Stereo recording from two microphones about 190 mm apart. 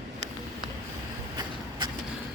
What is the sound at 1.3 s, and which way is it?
Vehicle, 25° right (ahead or behind).